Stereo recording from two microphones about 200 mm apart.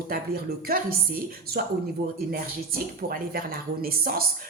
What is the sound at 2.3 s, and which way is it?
A woman's voice, 50° right (ahead or behind).